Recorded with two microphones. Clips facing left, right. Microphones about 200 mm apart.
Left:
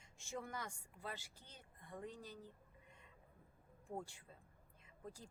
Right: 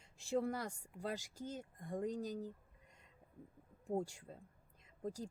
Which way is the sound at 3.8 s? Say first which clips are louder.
Right 9 dB; 40° right (ahead or behind).